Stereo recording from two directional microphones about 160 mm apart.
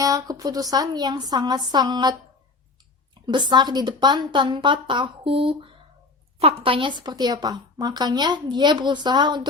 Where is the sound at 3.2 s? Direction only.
30° right (ahead or behind).